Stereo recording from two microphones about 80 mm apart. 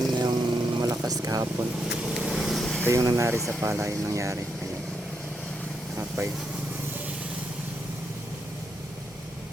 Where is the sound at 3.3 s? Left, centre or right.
Right.